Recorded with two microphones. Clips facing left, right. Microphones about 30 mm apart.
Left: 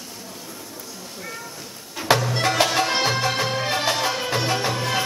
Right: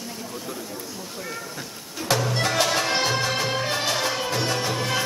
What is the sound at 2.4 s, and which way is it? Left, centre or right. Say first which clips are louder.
Music: left 2 dB; centre.